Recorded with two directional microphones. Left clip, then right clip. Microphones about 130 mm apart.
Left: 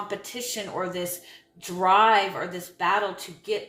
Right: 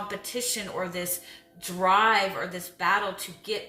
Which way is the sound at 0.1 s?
25° left (ahead or behind).